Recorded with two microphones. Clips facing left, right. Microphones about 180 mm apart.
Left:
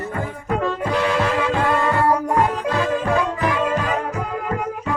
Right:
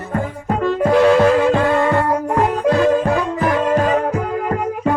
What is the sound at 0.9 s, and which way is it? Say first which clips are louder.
Music: right 11 dB; 45° right (ahead or behind).